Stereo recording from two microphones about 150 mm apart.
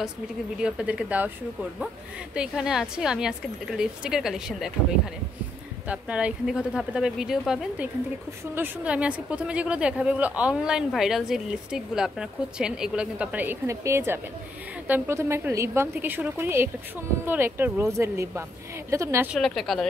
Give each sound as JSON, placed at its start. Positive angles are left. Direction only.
{"t": 0.6, "sound": "a woman's voice", "side_deg": -5}
{"t": 5.9, "sound": "a woman's voice", "side_deg": -10}
{"t": 19.3, "sound": "a woman's voice", "side_deg": 0}